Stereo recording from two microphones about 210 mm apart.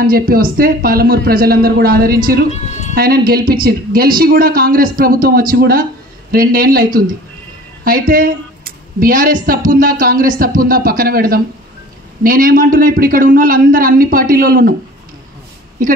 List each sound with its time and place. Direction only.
0.0 s a man's voice: 45° right (ahead or behind)